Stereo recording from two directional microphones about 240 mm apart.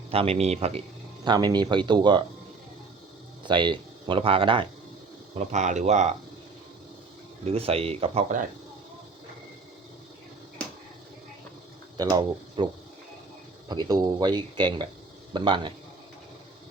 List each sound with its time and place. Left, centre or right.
0.1 s speech: right
3.4 s speech: centre
7.4 s speech: right
11.9 s speech: centre
13.7 s speech: centre